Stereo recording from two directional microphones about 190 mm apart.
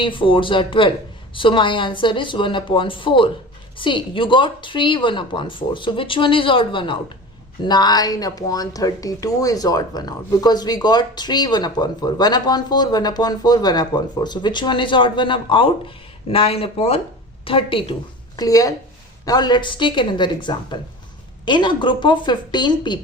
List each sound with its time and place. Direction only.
0.0 s a woman's voice: 25° left (ahead or behind)